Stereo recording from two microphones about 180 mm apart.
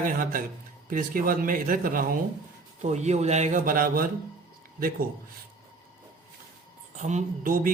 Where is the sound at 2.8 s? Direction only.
40° right (ahead or behind); by 5.0 s 55° right (ahead or behind).